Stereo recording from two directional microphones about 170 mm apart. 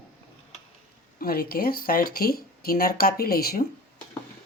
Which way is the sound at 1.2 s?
60° left (ahead or behind).